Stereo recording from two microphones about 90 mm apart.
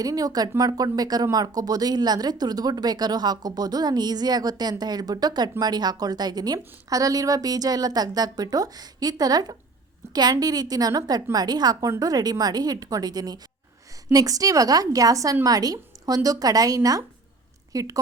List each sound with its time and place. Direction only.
0.0 s a woman's voice: 40° right (ahead or behind)